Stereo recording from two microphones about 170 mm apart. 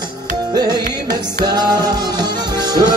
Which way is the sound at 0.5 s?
25° right (ahead or behind).